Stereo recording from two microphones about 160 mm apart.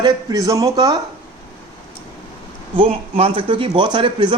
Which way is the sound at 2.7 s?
35° right (ahead or behind).